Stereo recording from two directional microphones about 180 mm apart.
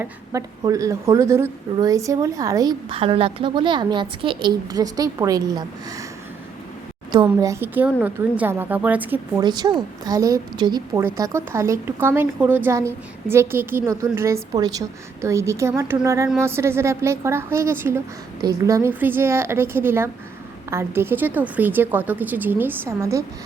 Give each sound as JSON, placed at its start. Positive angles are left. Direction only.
{"t": 0.0, "sound": "a woman's voice", "side_deg": -20}
{"t": 7.1, "sound": "a woman's voice", "side_deg": -20}
{"t": 9.4, "sound": "a woman's voice", "side_deg": -25}